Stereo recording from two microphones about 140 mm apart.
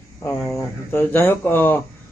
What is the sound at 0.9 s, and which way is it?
Speech, 15° left (ahead or behind).